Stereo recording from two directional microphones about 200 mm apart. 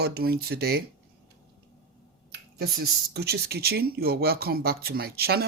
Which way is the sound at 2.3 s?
55° right (ahead or behind).